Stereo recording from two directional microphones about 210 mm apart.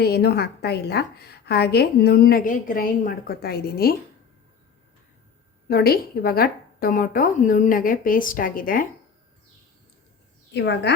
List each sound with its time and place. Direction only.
0.0 s a woman's voice: 50° left (ahead or behind)
5.6 s a woman's voice: 45° left (ahead or behind)
10.5 s a woman's voice: 55° left (ahead or behind)